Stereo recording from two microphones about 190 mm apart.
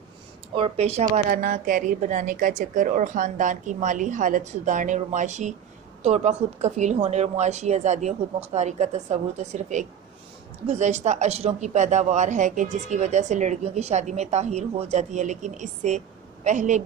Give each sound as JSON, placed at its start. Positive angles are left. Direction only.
{"t": 0.5, "sound": "a woman's voice", "side_deg": -30}